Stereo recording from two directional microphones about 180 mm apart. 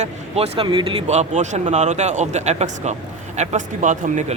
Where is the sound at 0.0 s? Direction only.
35° right (ahead or behind).